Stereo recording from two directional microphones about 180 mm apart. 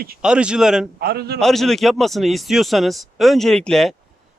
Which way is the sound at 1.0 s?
60° right (ahead or behind).